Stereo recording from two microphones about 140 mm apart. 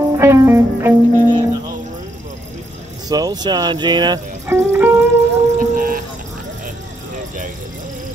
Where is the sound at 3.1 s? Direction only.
30° right (ahead or behind).